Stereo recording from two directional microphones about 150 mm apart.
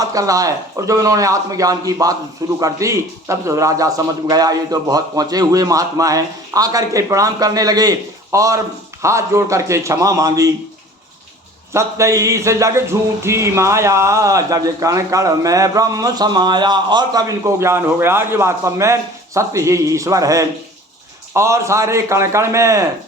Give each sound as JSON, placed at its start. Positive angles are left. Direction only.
{"t": 0.0, "sound": "music", "side_deg": -20}
{"t": 11.7, "sound": "music", "side_deg": -20}